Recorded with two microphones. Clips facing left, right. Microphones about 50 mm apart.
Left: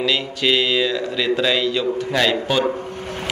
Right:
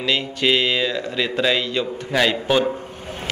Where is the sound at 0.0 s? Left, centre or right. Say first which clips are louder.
Left 1 dB; centre.